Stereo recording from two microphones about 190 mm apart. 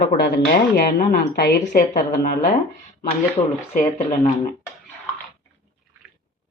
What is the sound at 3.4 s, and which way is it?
Speech, 30° left (ahead or behind).